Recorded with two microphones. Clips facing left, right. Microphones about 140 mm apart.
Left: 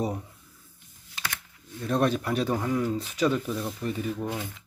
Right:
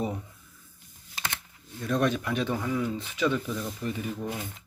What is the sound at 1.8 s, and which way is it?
Speech, 35° left (ahead or behind).